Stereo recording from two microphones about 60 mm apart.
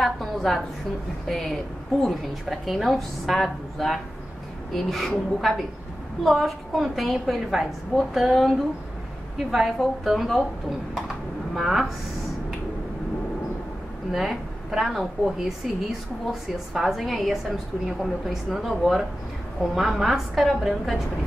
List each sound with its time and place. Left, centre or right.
0.0 s a sound: centre
1.3 s a woman's voice: centre
11.5 s a woman's voice: centre
14.1 s a woman's voice: centre